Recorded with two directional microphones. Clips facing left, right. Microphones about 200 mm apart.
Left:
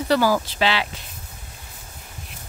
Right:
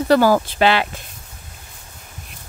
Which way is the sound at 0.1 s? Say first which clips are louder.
Right 5 dB; 55° right (ahead or behind).